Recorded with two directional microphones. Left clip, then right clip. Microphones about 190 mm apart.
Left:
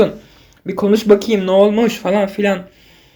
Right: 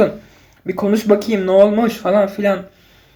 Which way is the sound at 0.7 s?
25° left (ahead or behind).